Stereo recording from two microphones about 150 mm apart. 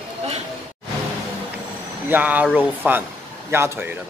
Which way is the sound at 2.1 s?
10° right (ahead or behind).